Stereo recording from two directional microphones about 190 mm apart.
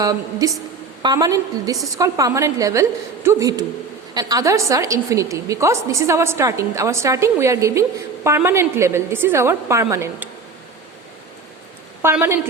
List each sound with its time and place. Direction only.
0.0 s a woman's voice: 20° right (ahead or behind)
12.0 s a woman's voice: 10° right (ahead or behind)